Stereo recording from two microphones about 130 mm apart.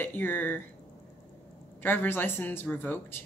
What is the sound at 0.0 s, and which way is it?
Speech, 15° left (ahead or behind).